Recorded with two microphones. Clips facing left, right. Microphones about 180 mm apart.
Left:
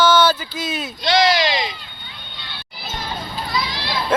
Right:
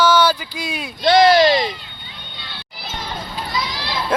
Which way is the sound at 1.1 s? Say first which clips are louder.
Right 6 dB; 55° right (ahead or behind).